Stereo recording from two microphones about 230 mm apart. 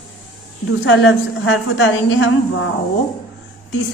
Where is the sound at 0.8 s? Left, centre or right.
Left.